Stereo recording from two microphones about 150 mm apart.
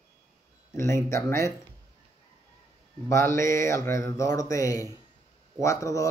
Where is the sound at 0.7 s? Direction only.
20° left (ahead or behind).